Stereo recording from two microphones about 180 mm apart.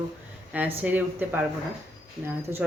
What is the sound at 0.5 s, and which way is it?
Speech, 10° right (ahead or behind).